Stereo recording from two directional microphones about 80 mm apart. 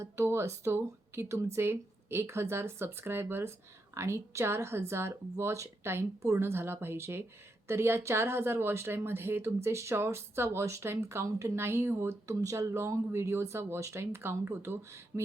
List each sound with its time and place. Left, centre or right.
0.0 s speech: right